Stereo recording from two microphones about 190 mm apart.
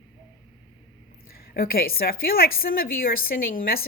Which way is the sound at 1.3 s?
50° left (ahead or behind).